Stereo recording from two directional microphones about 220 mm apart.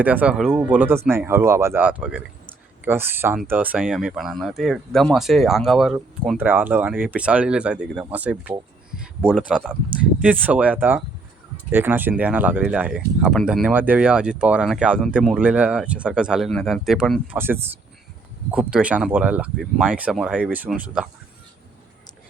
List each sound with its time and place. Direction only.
0.0 s speech: 5° right (ahead or behind)
9.0 s a sound: 5° right (ahead or behind)
10.2 s speech: 5° right (ahead or behind)